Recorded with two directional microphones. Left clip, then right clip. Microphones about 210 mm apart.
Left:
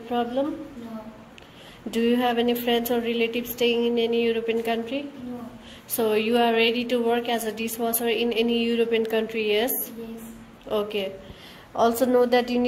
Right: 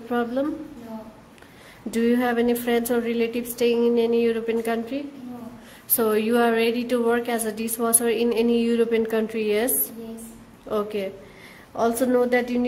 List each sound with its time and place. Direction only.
0.1 s a woman's voice: 30° right (ahead or behind)
1.9 s a woman's voice: 20° right (ahead or behind)
10.7 s a woman's voice: 20° right (ahead or behind)